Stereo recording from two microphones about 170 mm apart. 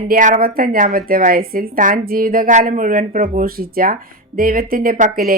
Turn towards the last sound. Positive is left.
turn(degrees=-55)  # may be behind; listen again after turning